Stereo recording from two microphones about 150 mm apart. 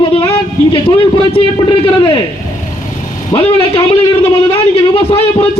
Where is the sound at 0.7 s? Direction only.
35° left (ahead or behind).